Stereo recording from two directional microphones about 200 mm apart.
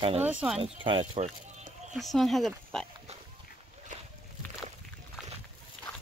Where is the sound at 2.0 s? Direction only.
Centre (ahead or behind).